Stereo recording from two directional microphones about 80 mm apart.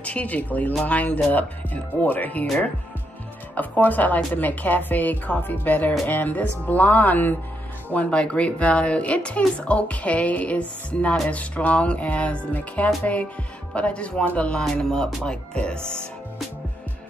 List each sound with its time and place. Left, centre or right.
0.0 s a woman's voice: centre
3.5 s a woman's voice: left